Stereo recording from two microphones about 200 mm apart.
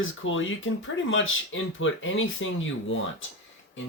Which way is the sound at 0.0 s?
75° left (ahead or behind).